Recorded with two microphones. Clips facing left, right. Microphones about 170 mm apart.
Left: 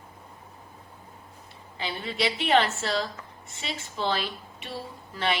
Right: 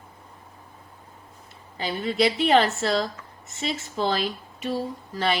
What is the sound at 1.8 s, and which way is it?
Speech, 45° right (ahead or behind).